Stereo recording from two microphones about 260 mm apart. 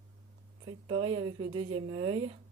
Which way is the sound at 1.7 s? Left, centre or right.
Centre.